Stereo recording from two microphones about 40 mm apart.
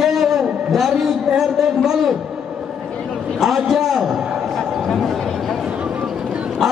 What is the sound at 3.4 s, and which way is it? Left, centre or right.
Speech, centre.